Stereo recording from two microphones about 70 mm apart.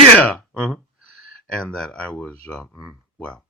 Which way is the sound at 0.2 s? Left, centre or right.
Centre.